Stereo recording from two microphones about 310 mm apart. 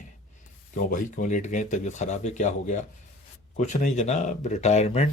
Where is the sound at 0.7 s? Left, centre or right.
Left.